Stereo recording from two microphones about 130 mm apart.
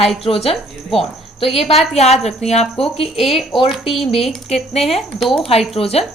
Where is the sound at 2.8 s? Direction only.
Centre (ahead or behind).